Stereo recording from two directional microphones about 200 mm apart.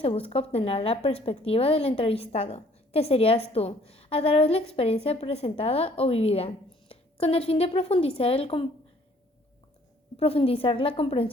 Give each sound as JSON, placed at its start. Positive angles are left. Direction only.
{"t": 0.0, "sound": "speech", "side_deg": 30}
{"t": 10.2, "sound": "speech", "side_deg": 30}